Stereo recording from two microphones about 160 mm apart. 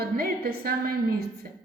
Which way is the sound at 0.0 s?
75° right (ahead or behind).